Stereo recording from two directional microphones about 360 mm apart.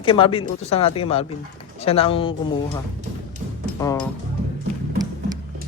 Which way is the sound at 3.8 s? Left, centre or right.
Centre.